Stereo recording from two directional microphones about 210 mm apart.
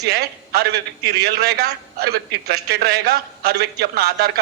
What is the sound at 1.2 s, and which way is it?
A man's voice, 50° right (ahead or behind).